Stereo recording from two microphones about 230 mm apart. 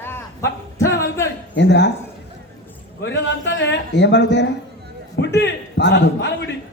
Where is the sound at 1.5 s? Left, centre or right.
Left.